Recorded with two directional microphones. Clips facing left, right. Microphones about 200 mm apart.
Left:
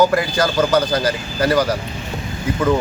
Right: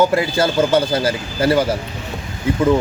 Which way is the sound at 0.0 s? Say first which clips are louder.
Even; 25° right (ahead or behind).